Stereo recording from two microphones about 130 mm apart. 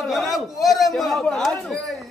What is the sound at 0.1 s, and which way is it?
A man's voice, centre (ahead or behind).